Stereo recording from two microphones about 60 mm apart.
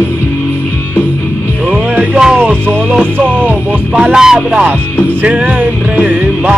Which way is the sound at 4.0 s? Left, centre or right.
Centre.